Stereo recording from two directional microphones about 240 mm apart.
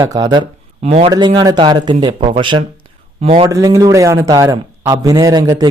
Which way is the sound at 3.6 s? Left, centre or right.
Centre.